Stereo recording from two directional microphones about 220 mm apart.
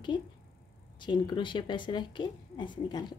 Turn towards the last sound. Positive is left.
turn(degrees=20)  # may be behind; listen again after turning